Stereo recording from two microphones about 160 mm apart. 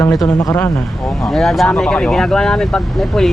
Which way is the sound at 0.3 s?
15° left (ahead or behind).